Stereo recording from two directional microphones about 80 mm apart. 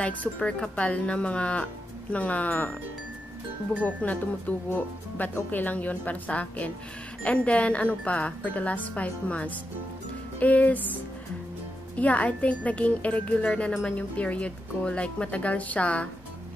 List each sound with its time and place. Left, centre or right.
0.0 s speech: centre
3.8 s speech: centre
12.0 s speech: centre